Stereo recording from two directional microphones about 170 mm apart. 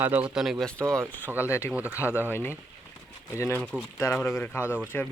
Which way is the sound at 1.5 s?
15° left (ahead or behind).